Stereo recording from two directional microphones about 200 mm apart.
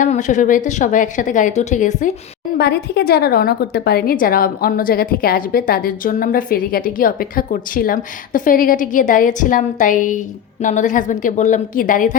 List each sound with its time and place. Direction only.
0.0 s a woman's voice: 40° left (ahead or behind)
2.6 s a woman's voice: 55° left (ahead or behind)